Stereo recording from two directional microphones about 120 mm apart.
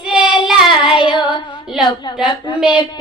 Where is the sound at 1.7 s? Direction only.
5° right (ahead or behind).